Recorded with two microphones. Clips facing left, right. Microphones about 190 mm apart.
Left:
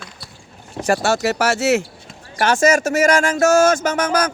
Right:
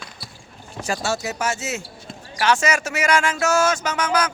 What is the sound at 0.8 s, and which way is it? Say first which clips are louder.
Speech: left 7 dB; 65° left (ahead or behind).